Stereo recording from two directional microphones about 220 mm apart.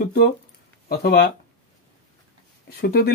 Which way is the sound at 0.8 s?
45° left (ahead or behind).